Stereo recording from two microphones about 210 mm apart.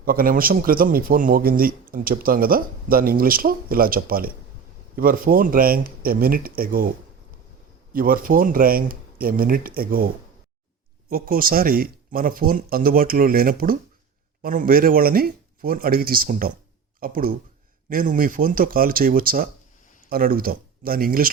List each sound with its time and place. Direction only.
0.0 s a man's voice: 45° right (ahead or behind)
7.9 s a man's voice: 40° right (ahead or behind)
11.1 s a man's voice: 45° right (ahead or behind)